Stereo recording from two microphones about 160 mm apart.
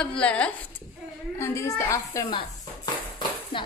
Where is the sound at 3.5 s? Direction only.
30° left (ahead or behind).